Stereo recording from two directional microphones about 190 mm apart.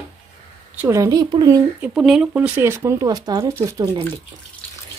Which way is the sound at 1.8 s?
Centre (ahead or behind).